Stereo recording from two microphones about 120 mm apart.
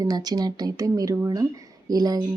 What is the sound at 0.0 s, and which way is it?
Speech, 30° right (ahead or behind).